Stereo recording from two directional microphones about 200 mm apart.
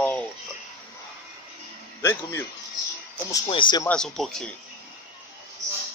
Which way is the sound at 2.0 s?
15° left (ahead or behind).